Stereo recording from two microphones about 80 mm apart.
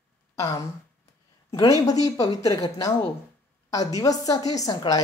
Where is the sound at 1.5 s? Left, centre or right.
Left.